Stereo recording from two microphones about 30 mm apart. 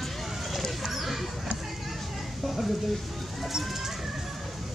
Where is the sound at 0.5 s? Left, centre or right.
Centre.